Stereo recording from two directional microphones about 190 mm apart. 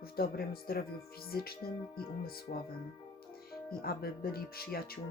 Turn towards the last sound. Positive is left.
turn(degrees=55)  # may be behind; listen again after turning